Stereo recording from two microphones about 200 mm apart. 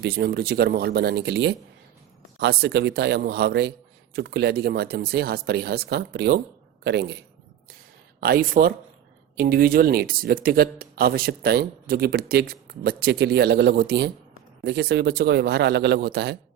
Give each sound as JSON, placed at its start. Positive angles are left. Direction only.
{"t": 0.0, "sound": "a man's voice", "side_deg": -55}
{"t": 8.2, "sound": "a man's voice", "side_deg": -45}